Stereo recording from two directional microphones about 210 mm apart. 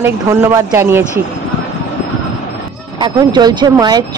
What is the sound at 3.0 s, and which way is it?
Speech, 20° right (ahead or behind).